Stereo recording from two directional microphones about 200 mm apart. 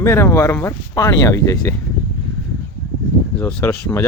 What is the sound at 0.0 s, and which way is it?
Speech, 15° left (ahead or behind).